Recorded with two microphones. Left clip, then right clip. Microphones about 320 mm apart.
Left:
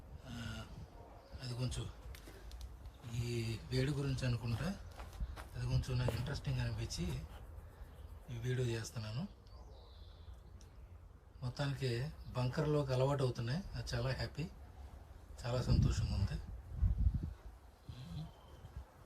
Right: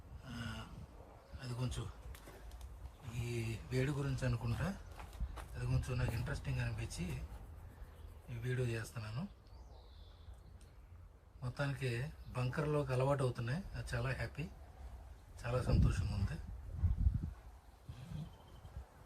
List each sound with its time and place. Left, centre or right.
0.3 s a sound: centre
3.2 s speech: centre
8.3 s speech: centre
11.4 s speech: centre
15.4 s speech: centre